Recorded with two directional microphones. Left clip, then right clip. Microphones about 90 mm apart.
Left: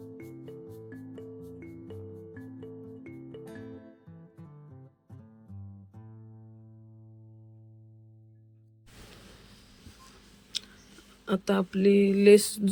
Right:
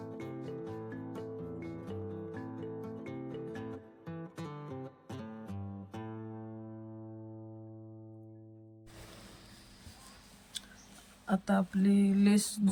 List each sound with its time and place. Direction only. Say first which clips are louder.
0.0 s music: right 2 dB; centre (ahead or behind)
4.0 s music: right 10 dB; 15° left (ahead or behind)
4.5 s music: right 12 dB; 20° right (ahead or behind)
5.6 s music: right 11 dB; 20° left (ahead or behind)
6.3 s music: right 12 dB; 20° right (ahead or behind)
11.3 s speech: left 4 dB; 20° left (ahead or behind)